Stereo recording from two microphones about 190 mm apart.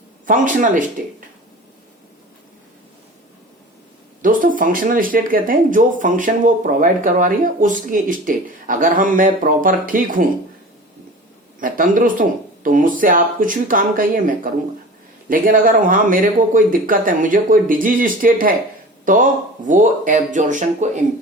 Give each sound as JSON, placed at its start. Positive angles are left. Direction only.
{"t": 0.3, "sound": "speech", "side_deg": -45}
{"t": 4.2, "sound": "speech", "side_deg": -45}
{"t": 11.6, "sound": "speech", "side_deg": -45}